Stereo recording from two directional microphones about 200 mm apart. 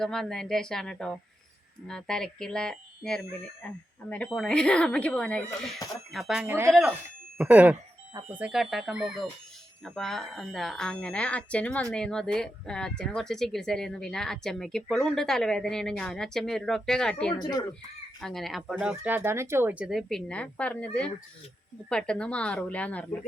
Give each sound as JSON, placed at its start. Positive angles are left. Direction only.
{"t": 0.0, "sound": "speech", "side_deg": 5}
{"t": 17.3, "sound": "speech", "side_deg": 20}
{"t": 18.2, "sound": "speech", "side_deg": 0}